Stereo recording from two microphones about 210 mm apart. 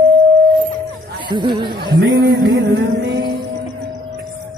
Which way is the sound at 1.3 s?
20° right (ahead or behind).